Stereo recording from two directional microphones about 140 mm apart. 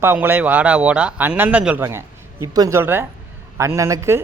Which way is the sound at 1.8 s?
20° right (ahead or behind).